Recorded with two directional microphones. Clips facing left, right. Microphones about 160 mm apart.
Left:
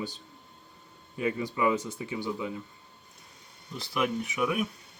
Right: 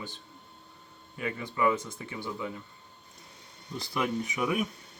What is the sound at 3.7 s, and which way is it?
Speech, 5° left (ahead or behind).